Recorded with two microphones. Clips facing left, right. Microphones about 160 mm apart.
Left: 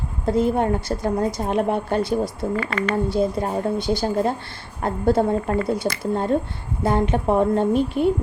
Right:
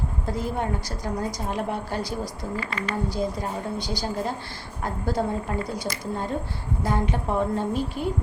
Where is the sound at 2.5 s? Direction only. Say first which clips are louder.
Left 6 dB; 65° left (ahead or behind).